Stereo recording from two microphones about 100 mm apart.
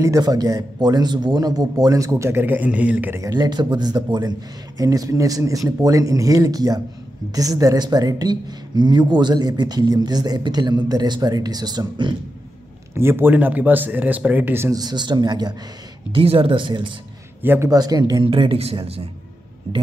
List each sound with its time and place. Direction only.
0.0 s speech: 35° right (ahead or behind); by 3.2 s 15° right (ahead or behind)
3.2 s a woman's voice: 45° right (ahead or behind)
12.9 s speech: 25° right (ahead or behind)
14.7 s a woman's voice: 40° right (ahead or behind)
16.1 s speech: 60° right (ahead or behind)
17.4 s a man's voice: 20° right (ahead or behind)
17.6 s speech: 40° right (ahead or behind)
18.2 s speech: 60° right (ahead or behind)